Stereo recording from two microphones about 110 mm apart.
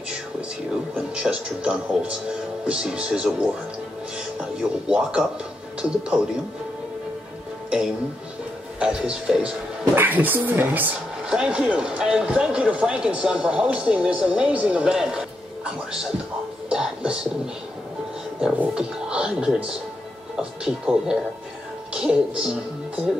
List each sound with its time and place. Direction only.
0.9 s speech: 10° right (ahead or behind)
8.7 s speech: 5° right (ahead or behind)
18.4 s speech: 5° right (ahead or behind)